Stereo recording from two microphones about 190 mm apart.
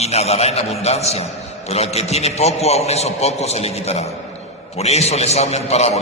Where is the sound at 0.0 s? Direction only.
35° left (ahead or behind).